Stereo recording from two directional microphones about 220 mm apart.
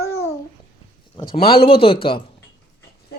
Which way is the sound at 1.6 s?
25° left (ahead or behind).